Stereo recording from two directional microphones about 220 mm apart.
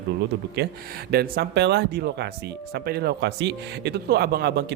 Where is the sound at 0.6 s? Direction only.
45° right (ahead or behind).